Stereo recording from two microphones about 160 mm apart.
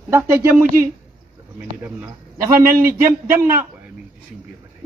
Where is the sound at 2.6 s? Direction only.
65° right (ahead or behind).